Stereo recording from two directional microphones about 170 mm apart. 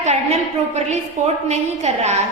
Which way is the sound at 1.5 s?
40° right (ahead or behind).